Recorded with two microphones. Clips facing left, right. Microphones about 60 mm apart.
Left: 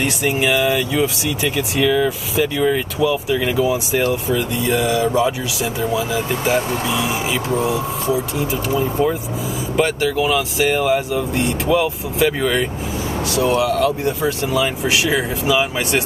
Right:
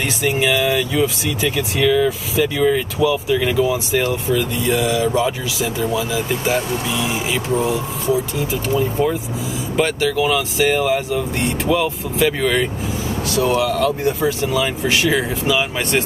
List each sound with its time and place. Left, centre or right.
0.3 s speech: centre
7.6 s speech: centre
8.4 s speech: centre